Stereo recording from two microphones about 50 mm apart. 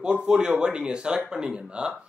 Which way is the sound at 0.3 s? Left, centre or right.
Centre.